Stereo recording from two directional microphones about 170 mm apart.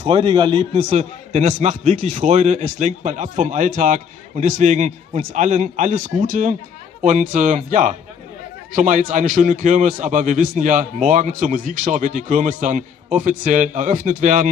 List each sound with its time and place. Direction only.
0.0 s a man's voice: 30° right (ahead or behind); by 14.5 s 50° right (ahead or behind)